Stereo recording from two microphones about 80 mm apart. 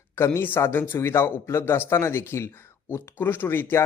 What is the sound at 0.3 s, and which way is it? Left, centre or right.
Speech, left.